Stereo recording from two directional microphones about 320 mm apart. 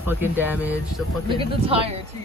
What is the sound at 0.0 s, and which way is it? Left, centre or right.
Speech, centre.